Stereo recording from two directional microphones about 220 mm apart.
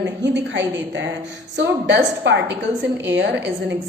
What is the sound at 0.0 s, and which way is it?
Speech, 55° right (ahead or behind).